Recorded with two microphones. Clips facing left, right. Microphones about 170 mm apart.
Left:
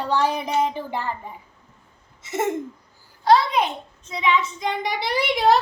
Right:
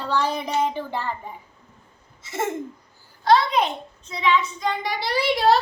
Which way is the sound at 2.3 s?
20° left (ahead or behind).